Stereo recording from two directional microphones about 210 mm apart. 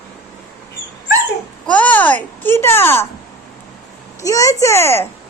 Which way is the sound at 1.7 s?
5° left (ahead or behind).